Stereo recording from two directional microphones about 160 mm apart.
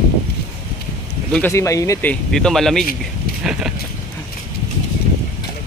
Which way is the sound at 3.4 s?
5° right (ahead or behind).